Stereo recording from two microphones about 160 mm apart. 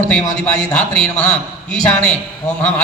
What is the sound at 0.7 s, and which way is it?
A man's voice, 5° left (ahead or behind).